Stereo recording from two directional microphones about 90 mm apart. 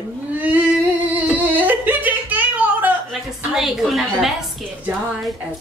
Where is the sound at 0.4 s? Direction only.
20° right (ahead or behind).